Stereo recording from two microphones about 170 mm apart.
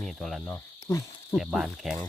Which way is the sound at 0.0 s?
Centre (ahead or behind).